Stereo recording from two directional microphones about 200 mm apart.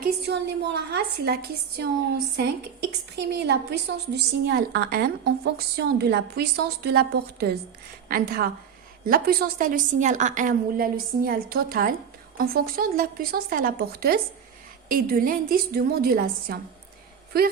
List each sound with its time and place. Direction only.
0.0 s a woman's voice: 55° right (ahead or behind)
3.2 s a woman's voice: 55° right (ahead or behind)